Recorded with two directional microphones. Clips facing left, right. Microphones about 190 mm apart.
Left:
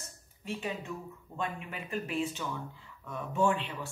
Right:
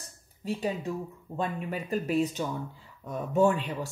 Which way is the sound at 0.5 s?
35° right (ahead or behind).